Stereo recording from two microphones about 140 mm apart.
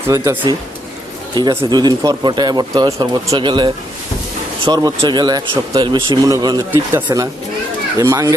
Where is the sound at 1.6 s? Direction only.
30° right (ahead or behind).